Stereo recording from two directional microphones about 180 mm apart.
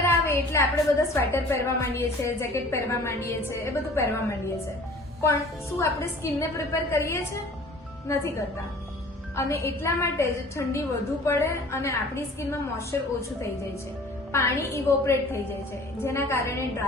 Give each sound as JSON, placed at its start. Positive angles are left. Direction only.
{"t": 0.1, "sound": "a woman's voice", "side_deg": 15}
{"t": 14.3, "sound": "a woman's voice", "side_deg": 15}